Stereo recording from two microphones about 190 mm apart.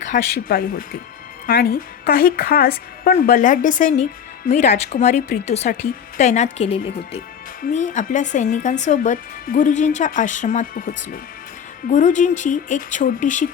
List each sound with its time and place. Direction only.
0.0 s speech: 50° left (ahead or behind)